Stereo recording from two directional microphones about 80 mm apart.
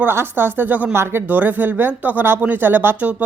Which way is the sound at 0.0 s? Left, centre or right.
Right.